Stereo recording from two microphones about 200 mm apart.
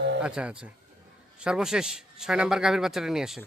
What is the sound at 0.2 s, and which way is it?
A man's voice, 5° right (ahead or behind).